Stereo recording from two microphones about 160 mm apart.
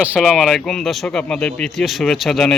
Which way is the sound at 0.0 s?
5° right (ahead or behind).